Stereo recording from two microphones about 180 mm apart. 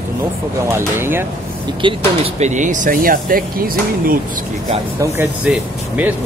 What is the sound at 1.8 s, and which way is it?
Speech, 25° right (ahead or behind).